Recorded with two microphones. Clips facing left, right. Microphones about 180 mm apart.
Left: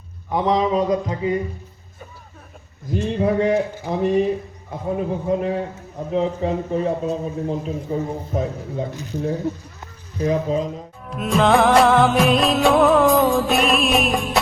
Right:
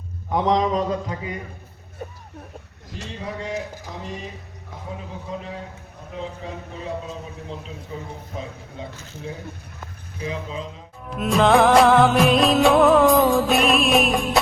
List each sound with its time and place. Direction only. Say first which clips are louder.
0.3 s a man's voice: left 1 dB; centre (ahead or behind); by 1.3 s 20° left (ahead or behind)
3.1 s a man's voice: left 12 dB; 60° left (ahead or behind)
8.9 s a man's voice: left 9 dB; 15° left (ahead or behind)
10.2 s speech: left 10 dB; 45° left (ahead or behind)
11.1 s music: even; centre (ahead or behind)